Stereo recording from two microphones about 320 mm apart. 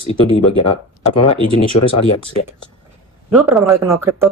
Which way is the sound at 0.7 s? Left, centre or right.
Left.